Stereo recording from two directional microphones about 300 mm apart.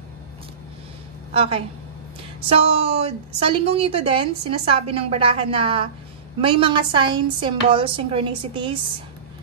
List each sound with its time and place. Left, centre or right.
1.3 s a woman's voice: centre